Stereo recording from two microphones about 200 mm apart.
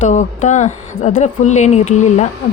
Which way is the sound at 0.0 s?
35° left (ahead or behind).